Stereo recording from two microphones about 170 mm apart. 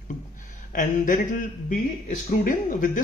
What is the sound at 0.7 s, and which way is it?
Speech, 50° left (ahead or behind).